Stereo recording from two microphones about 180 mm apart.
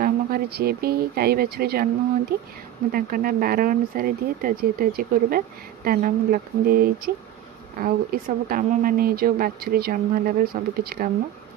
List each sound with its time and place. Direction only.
0.0 s speech: 60° right (ahead or behind)